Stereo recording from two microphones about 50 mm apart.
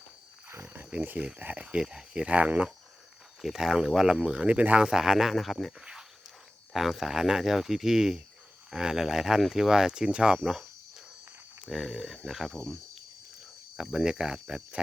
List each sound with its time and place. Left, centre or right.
0.7 s wild animals: right
0.9 s speech: right
1.8 s speech: centre
2.3 s speech: right
3.4 s speech: centre
4.5 s speech: right
4.9 s speech: centre
5.8 s speech: centre
10.3 s cricket: centre
11.6 s speech: centre
12.5 s cricket: centre
13.7 s speech: centre
14.3 s speech: centre